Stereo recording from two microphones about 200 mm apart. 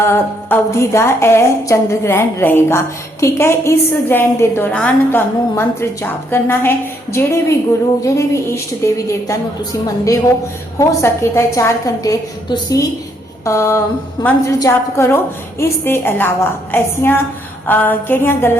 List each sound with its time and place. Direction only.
0.0 s a woman's voice: 10° left (ahead or behind)